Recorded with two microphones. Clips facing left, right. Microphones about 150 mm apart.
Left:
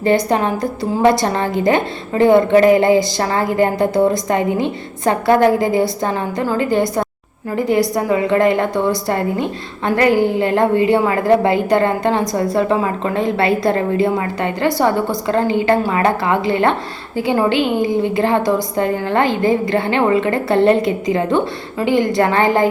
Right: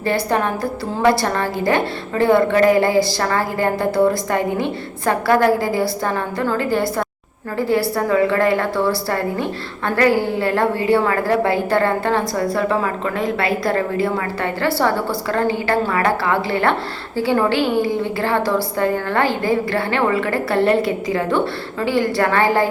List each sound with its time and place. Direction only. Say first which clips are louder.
0.0 s a woman's voice: left 4 dB; 20° left (ahead or behind)